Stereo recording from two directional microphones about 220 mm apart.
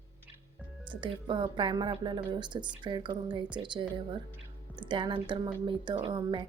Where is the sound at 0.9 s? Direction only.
20° right (ahead or behind).